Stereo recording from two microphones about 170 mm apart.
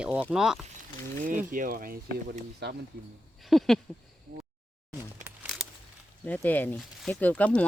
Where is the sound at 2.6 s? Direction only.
75° right (ahead or behind).